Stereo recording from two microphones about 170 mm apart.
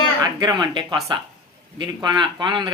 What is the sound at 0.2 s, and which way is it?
Speech, 25° right (ahead or behind).